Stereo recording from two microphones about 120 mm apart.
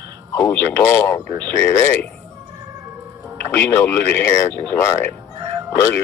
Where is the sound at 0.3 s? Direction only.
20° left (ahead or behind).